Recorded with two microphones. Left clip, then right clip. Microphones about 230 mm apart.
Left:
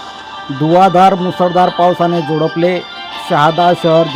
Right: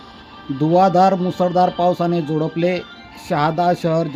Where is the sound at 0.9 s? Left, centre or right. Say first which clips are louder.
Left 6 dB; centre.